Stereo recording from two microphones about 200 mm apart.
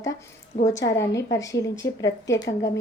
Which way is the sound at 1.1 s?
15° left (ahead or behind).